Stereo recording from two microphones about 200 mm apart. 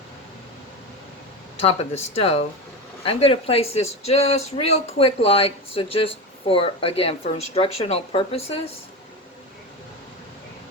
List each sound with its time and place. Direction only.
1.5 s speech: 30° left (ahead or behind)